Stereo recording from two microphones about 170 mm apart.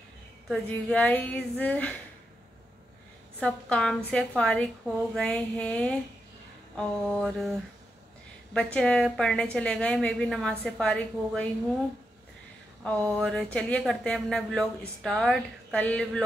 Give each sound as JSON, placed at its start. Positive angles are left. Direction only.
{"t": 0.5, "sound": "a woman's voice", "side_deg": 5}
{"t": 3.3, "sound": "a woman's voice", "side_deg": 5}
{"t": 8.5, "sound": "a woman's voice", "side_deg": 5}
{"t": 12.8, "sound": "a woman's voice", "side_deg": 5}